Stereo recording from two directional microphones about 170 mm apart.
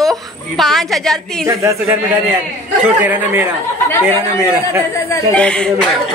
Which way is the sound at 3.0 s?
10° right (ahead or behind).